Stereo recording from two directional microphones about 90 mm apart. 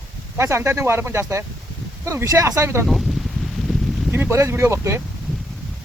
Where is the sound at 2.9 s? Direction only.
Centre (ahead or behind).